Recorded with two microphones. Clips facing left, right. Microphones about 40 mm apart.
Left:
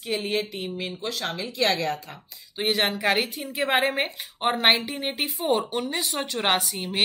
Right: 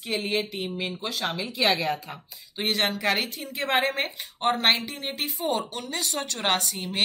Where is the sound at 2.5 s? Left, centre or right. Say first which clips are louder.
Left 2 dB; centre.